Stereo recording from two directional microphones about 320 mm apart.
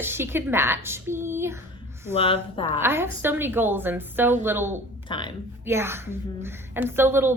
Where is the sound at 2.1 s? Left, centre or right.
Centre.